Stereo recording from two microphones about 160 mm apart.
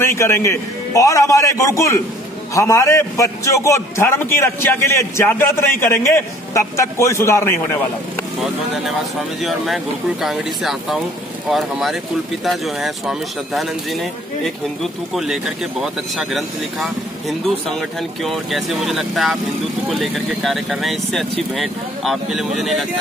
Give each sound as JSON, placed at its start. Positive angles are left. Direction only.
{"t": 0.0, "sound": "a man's voice", "side_deg": 15}
{"t": 9.4, "sound": "speech", "side_deg": 0}